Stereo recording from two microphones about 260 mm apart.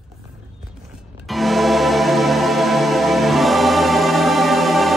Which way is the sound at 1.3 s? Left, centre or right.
Centre.